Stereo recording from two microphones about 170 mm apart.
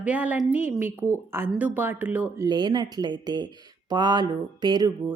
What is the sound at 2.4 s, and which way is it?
Speech, 25° right (ahead or behind).